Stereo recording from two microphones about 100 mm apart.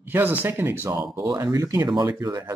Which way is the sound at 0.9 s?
35° right (ahead or behind).